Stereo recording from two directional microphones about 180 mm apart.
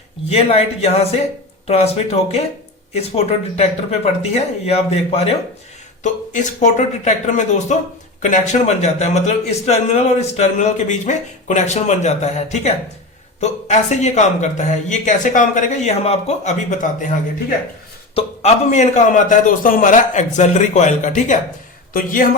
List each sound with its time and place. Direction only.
0.3 s a man's voice: 35° left (ahead or behind); by 22.3 s 50° left (ahead or behind)